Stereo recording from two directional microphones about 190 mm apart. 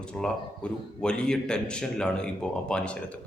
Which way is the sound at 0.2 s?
5° left (ahead or behind).